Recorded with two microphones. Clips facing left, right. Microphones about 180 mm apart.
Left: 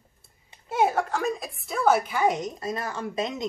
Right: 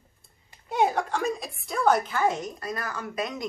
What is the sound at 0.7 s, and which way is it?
A woman's voice, centre (ahead or behind).